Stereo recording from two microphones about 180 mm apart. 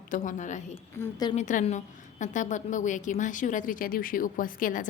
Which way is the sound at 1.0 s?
20° left (ahead or behind).